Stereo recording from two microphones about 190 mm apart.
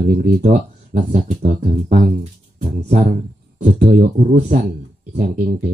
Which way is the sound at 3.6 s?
40° right (ahead or behind).